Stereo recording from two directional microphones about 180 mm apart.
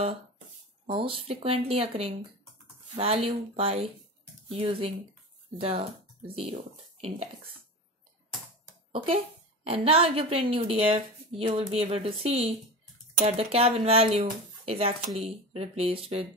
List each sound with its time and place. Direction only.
0.8 s a woman's voice: 30° right (ahead or behind)
8.9 s a woman's voice: 30° right (ahead or behind)